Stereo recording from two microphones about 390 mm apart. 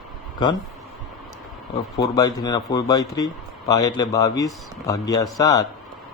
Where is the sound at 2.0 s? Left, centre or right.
Centre.